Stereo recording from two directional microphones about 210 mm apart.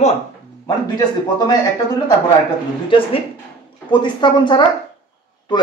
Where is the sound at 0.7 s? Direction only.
20° left (ahead or behind).